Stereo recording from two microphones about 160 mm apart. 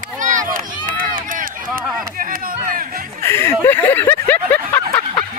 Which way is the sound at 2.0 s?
60° right (ahead or behind).